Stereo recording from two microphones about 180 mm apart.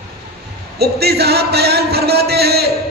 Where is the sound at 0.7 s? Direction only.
60° right (ahead or behind).